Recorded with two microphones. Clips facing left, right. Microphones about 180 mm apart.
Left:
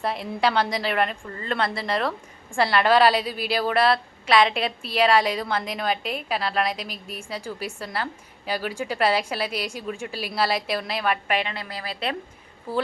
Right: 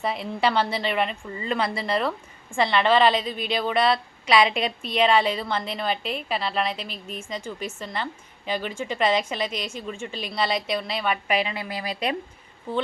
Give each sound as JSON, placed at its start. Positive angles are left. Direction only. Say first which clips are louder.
{"t": 0.0, "sound": "a woman's voice", "louder": "even", "side_deg": 0}
{"t": 11.5, "sound": "speech", "louder": "right 3 dB", "side_deg": -15}
{"t": 12.7, "sound": "a woman's voice", "louder": "left 1 dB", "side_deg": 5}